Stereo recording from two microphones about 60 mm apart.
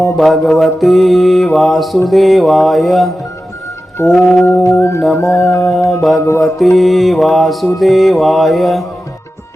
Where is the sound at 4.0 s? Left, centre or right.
Left.